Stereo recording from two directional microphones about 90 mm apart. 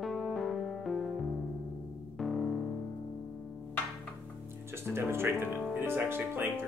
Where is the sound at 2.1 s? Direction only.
Centre (ahead or behind).